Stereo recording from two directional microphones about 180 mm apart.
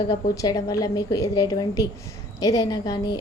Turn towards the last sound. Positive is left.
turn(degrees=20)  # may be behind; listen again after turning